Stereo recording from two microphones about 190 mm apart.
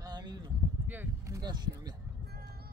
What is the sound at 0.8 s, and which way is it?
Speech, 10° right (ahead or behind).